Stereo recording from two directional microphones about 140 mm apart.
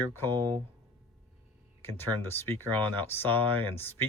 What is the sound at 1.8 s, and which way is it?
Speech, 15° left (ahead or behind).